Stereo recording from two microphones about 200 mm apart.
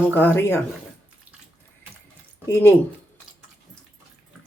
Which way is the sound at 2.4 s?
10° left (ahead or behind).